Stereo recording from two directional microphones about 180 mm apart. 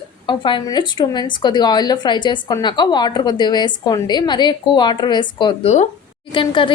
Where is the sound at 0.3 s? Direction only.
25° left (ahead or behind).